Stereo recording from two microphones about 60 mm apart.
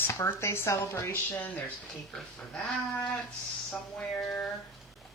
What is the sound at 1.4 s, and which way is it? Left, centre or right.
Speech, left.